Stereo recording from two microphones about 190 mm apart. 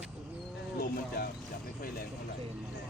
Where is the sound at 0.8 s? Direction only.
55° left (ahead or behind).